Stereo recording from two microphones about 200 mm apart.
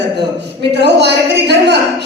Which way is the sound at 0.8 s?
60° right (ahead or behind).